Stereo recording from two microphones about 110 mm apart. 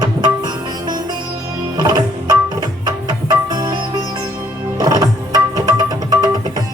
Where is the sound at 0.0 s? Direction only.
40° right (ahead or behind).